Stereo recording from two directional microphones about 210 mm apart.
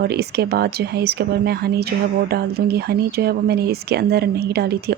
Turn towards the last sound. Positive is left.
turn(degrees=-50)  # may be behind; listen again after turning